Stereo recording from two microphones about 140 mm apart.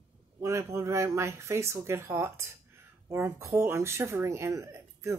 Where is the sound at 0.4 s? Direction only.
20° right (ahead or behind).